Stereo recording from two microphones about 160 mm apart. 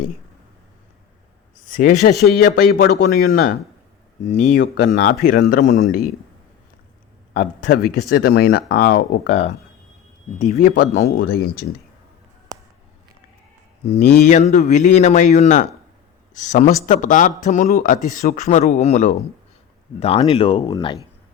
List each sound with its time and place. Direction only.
1.6 s speech: 55° left (ahead or behind)
2.3 s speech: 70° left (ahead or behind)
4.3 s speech: 50° left (ahead or behind)
7.3 s speech: 55° left (ahead or behind)
8.1 s speech: 75° left (ahead or behind)
10.6 s speech: 50° left (ahead or behind)
11.2 s speech: 75° left (ahead or behind)
13.8 s speech: 40° left (ahead or behind); by 18.4 s 60° left (ahead or behind)
18.4 s speech: 45° left (ahead or behind)